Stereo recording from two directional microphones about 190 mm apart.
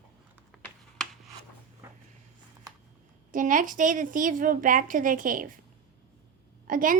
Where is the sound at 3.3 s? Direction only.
45° right (ahead or behind).